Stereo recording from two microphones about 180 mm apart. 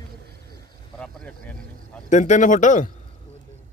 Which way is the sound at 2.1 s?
45° left (ahead or behind).